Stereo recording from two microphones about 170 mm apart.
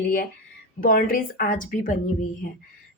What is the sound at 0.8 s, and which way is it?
A woman's voice, 55° left (ahead or behind).